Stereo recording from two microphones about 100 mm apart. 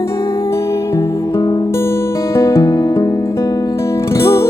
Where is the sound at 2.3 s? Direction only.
30° left (ahead or behind).